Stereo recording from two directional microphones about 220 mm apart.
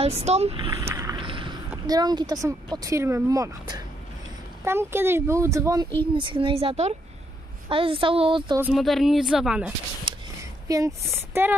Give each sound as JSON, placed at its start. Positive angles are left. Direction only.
{"t": 0.0, "sound": "speech", "side_deg": -30}
{"t": 0.7, "sound": "vehicle", "side_deg": -15}
{"t": 1.9, "sound": "speech", "side_deg": -15}
{"t": 8.5, "sound": "a woman's voice", "side_deg": -5}
{"t": 10.1, "sound": "a sound", "side_deg": -20}
{"t": 10.7, "sound": "speech", "side_deg": -15}